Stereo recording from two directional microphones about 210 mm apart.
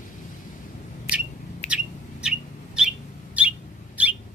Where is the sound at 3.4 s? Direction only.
5° right (ahead or behind).